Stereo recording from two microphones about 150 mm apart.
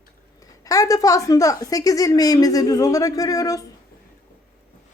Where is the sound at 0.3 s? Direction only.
25° left (ahead or behind).